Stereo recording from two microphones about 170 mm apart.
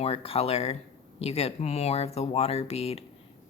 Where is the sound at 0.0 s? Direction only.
35° left (ahead or behind).